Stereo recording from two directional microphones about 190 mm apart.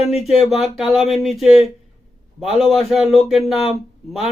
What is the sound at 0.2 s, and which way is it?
A man's voice, centre (ahead or behind).